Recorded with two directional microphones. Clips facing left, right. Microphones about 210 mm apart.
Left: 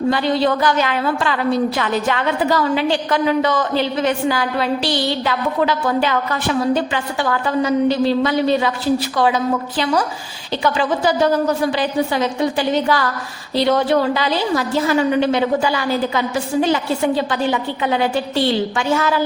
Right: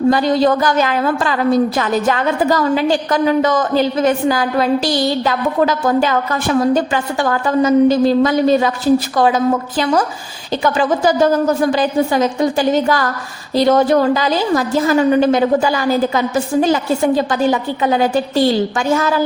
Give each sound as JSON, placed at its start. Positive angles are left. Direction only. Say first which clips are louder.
{"t": 0.1, "sound": "a woman's voice", "louder": "right 3 dB", "side_deg": -40}